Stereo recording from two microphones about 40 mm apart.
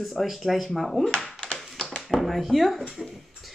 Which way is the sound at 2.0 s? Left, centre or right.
Centre.